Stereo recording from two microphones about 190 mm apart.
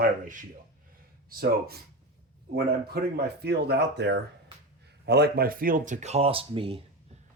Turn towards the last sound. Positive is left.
turn(degrees=-30)  # may be behind; listen again after turning